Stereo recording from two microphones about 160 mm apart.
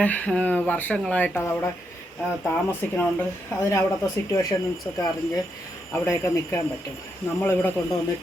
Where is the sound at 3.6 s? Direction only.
20° left (ahead or behind).